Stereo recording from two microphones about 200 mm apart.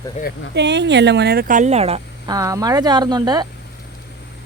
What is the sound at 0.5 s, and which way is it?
Speech, 60° right (ahead or behind).